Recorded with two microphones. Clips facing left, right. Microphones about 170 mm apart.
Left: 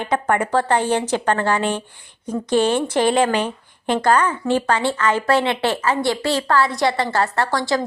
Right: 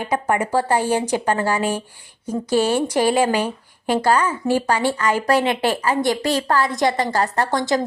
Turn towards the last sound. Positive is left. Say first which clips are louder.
# right 1 dB
turn(degrees=-20)  # may be behind; listen again after turning